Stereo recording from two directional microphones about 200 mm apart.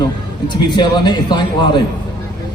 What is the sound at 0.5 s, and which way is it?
A man's voice, 20° left (ahead or behind).